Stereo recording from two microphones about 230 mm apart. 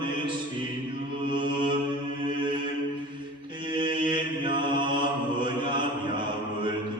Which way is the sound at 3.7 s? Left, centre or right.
Centre.